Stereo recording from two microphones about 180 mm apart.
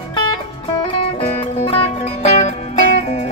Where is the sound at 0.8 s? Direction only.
30° left (ahead or behind).